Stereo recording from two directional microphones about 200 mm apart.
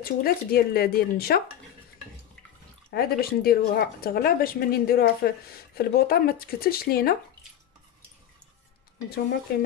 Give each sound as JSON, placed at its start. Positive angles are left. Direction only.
{"t": 0.0, "sound": "speech", "side_deg": 50}
{"t": 2.9, "sound": "speech", "side_deg": 50}